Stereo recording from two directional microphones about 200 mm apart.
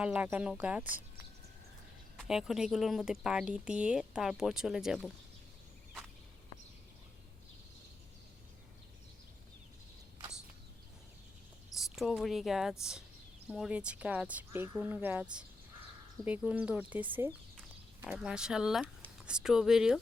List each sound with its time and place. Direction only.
0.0 s speech: 5° right (ahead or behind)
2.1 s speech: centre (ahead or behind)
11.8 s speech: centre (ahead or behind)